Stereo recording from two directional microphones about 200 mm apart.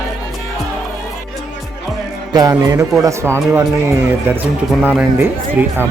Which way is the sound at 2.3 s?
20° right (ahead or behind).